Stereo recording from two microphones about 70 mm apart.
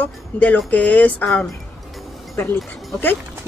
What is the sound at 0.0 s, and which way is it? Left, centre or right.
Speech, left.